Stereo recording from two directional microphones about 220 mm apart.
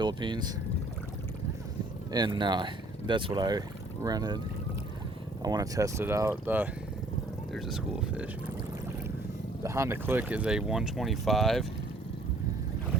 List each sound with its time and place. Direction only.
0.0 s speech: 20° right (ahead or behind)
2.1 s speech: 20° right (ahead or behind)
5.4 s speech: 15° right (ahead or behind)
9.6 s speech: 15° right (ahead or behind)